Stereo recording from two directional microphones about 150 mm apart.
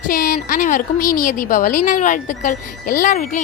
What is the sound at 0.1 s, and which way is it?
A woman's voice, 70° left (ahead or behind).